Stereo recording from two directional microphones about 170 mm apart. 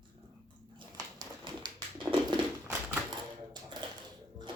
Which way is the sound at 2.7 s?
10° right (ahead or behind).